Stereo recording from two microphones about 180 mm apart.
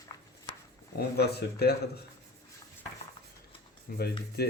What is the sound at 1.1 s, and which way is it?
Speech, 65° left (ahead or behind).